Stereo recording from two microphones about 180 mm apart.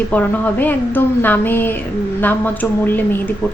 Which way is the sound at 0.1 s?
10° left (ahead or behind).